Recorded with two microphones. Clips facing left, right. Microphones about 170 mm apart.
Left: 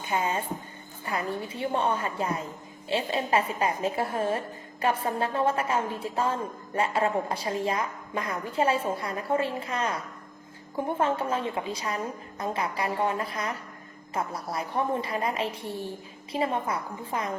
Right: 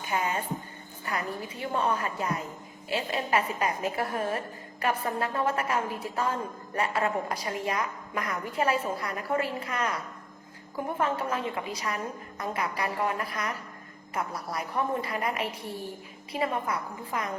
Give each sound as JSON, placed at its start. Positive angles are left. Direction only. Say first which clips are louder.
{"t": 0.0, "sound": "a woman's voice", "louder": "left 2 dB", "side_deg": 25}